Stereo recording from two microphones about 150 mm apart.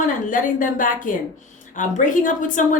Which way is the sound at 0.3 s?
60° left (ahead or behind).